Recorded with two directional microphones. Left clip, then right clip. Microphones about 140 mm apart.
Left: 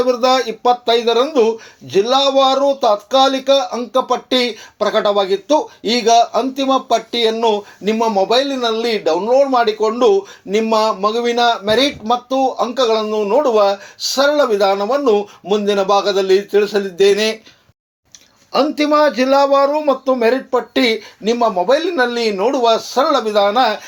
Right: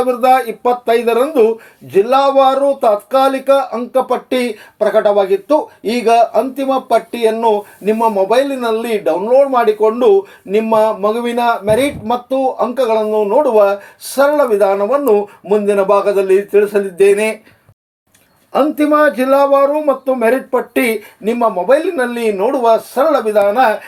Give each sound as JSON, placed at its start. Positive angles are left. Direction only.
{"t": 0.0, "sound": "speech", "side_deg": 20}
{"t": 0.3, "sound": "speech", "side_deg": 35}
{"t": 18.5, "sound": "speech", "side_deg": 30}